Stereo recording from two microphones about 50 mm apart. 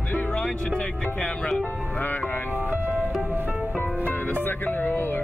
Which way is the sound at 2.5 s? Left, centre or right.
Right.